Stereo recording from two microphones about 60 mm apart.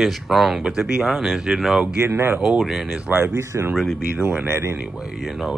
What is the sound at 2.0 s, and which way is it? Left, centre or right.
Speech, right.